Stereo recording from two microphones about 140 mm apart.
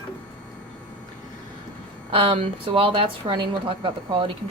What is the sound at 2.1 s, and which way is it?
A woman's voice, 45° right (ahead or behind).